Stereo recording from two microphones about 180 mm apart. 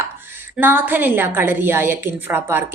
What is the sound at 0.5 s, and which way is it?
A woman's voice, 10° right (ahead or behind).